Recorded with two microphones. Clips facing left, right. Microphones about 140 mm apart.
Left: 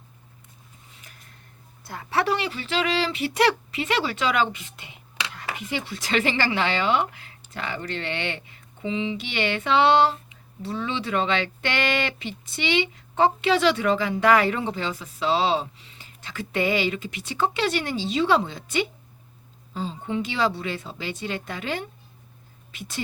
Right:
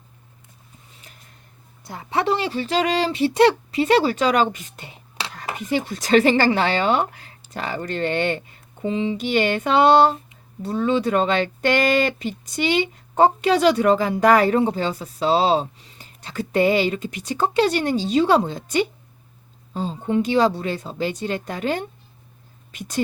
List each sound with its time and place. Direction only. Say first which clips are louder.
1.8 s speech: right 2 dB; 20° right (ahead or behind); by 23.0 s 45° right (ahead or behind)